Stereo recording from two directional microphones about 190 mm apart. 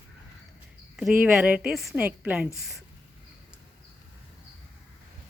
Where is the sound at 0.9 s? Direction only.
Centre (ahead or behind).